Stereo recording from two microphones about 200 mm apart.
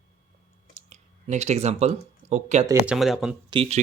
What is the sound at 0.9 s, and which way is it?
Speech, 35° right (ahead or behind).